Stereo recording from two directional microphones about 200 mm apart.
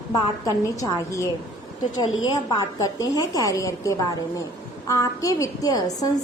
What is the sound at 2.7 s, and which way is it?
A woman's voice, 15° left (ahead or behind).